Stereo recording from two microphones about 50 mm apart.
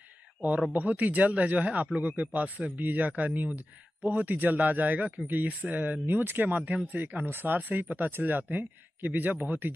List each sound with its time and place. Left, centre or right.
0.7 s speech: right